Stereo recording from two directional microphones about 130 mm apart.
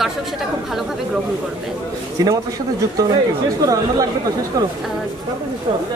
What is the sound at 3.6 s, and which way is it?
Speech, 25° right (ahead or behind).